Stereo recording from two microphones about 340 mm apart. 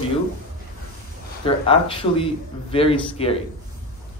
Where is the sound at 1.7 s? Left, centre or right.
Centre.